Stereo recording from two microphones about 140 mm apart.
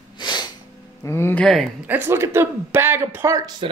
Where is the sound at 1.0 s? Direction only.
20° left (ahead or behind).